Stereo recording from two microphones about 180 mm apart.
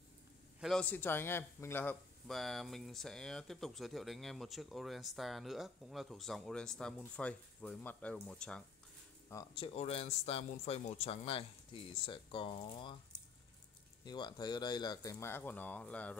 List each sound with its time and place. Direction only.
0.6 s speech: centre (ahead or behind)
9.6 s speech: 35° left (ahead or behind)
14.0 s speech: 25° left (ahead or behind); by 16.2 s 5° left (ahead or behind)